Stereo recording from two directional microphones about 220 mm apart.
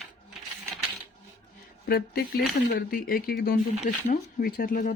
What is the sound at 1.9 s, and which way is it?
Speech, 45° left (ahead or behind).